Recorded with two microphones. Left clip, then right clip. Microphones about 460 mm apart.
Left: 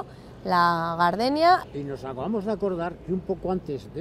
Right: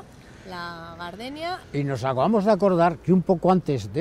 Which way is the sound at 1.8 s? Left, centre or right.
Right.